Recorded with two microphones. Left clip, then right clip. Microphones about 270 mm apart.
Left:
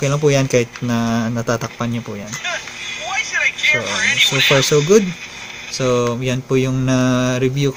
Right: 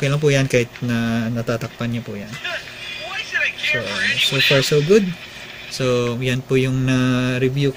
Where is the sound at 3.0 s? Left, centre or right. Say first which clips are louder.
Left 4 dB; centre.